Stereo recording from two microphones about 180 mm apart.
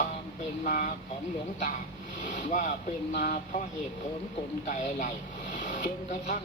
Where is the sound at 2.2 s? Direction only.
45° left (ahead or behind).